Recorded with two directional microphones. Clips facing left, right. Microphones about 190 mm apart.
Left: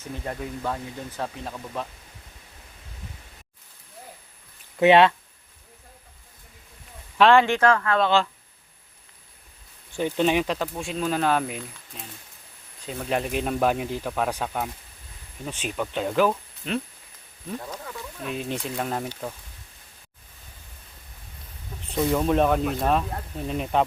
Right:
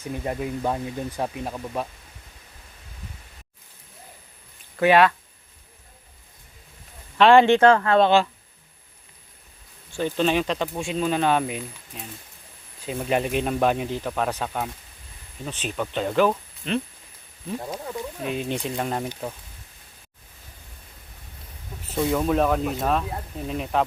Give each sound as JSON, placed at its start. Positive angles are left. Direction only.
{"t": 0.0, "sound": "speech", "side_deg": -15}
{"t": 4.8, "sound": "speech", "side_deg": 25}
{"t": 7.3, "sound": "speech", "side_deg": -25}
{"t": 9.9, "sound": "speech", "side_deg": 15}
{"t": 17.7, "sound": "speech", "side_deg": -25}
{"t": 18.3, "sound": "speech", "side_deg": 0}
{"t": 21.8, "sound": "speech", "side_deg": 0}